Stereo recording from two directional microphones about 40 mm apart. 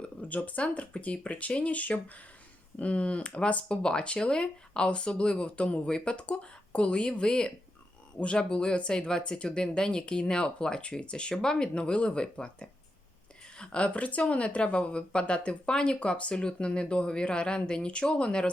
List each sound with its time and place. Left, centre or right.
0.2 s speech: left